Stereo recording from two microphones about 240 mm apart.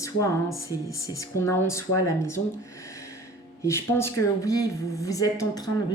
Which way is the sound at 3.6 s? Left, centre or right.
Centre.